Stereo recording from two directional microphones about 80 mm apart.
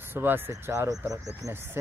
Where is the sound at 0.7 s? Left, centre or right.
Right.